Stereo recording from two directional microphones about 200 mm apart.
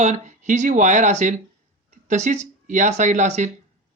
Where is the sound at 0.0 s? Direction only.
35° right (ahead or behind).